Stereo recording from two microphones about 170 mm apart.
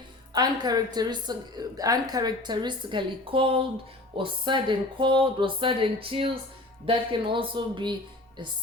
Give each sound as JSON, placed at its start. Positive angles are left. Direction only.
{"t": 0.3, "sound": "a woman's voice", "side_deg": -25}